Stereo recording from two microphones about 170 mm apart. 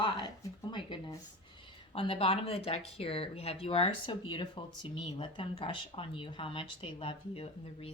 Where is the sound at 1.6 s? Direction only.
30° left (ahead or behind).